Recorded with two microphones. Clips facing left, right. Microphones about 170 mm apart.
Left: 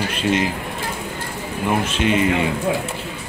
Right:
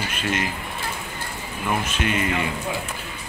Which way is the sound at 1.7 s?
30° left (ahead or behind).